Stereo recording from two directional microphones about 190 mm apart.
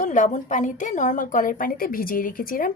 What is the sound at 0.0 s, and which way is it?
A woman's voice, 45° left (ahead or behind).